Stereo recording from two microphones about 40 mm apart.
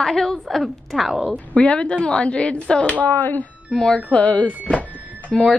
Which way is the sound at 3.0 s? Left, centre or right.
Left.